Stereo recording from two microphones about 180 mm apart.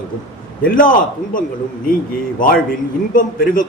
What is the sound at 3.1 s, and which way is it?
Speech, 50° left (ahead or behind).